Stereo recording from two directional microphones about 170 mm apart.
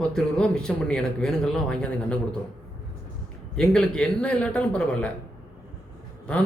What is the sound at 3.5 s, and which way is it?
A man's voice, 5° left (ahead or behind).